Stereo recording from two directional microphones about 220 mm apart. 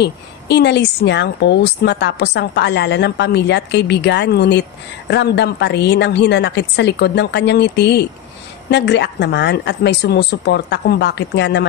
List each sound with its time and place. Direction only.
0.0 s a woman's voice: 50° left (ahead or behind)